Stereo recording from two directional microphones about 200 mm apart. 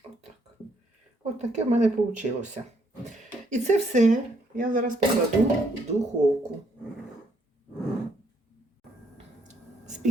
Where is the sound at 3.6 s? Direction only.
35° right (ahead or behind).